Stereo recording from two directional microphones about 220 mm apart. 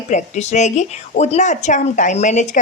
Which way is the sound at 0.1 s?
30° left (ahead or behind).